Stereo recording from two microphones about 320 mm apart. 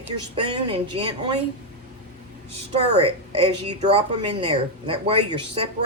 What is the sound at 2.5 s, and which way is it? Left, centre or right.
A woman's voice, centre.